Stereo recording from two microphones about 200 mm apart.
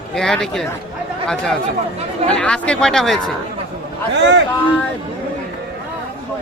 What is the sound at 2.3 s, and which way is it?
Speech, 5° left (ahead or behind).